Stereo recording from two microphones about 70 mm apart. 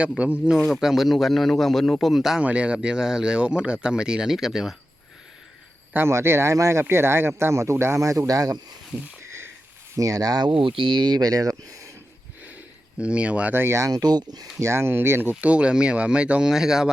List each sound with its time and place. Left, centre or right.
0.2 s speech: centre
0.5 s a man's voice: centre
2.4 s speech: centre
5.9 s speech: right
9.9 s speech: right
10.9 s speech: right
13.0 s speech: centre
13.5 s speech: right
13.9 s speech: right
14.6 s speech: right; by 16.9 s centre